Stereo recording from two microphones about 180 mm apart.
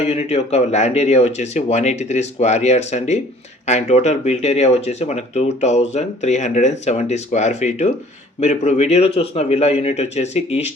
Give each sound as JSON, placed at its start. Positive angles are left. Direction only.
{"t": 0.0, "sound": "speech", "side_deg": 40}